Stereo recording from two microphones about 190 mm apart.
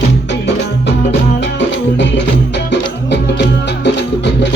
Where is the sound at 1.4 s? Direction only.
70° left (ahead or behind).